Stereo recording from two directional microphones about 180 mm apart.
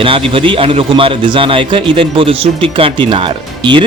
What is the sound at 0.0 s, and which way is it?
A man's voice, 30° right (ahead or behind).